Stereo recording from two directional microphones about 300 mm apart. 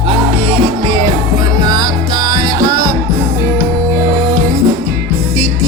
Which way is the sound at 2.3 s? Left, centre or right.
Centre.